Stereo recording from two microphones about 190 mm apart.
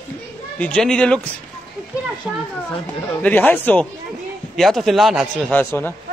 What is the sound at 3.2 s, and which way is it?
A man's voice, 10° left (ahead or behind).